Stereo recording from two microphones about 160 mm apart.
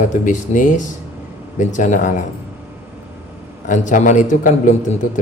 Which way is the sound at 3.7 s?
50° left (ahead or behind).